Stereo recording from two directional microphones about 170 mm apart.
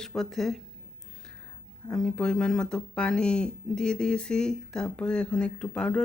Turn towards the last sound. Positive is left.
turn(degrees=5)  # may be behind; listen again after turning